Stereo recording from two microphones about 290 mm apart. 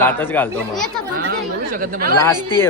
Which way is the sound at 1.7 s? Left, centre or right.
Right.